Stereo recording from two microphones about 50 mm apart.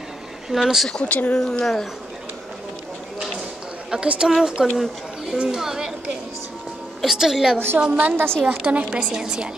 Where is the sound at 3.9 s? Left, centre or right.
Centre.